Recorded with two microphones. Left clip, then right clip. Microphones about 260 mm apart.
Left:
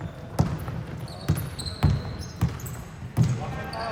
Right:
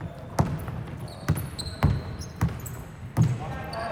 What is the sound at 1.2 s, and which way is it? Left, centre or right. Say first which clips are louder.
Basketball bounce: even; centre.